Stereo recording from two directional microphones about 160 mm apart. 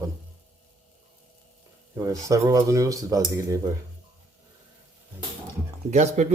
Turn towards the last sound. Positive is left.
turn(degrees=-45)  # may be behind; listen again after turning